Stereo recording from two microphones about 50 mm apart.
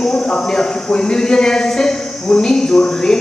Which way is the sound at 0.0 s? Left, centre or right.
Centre.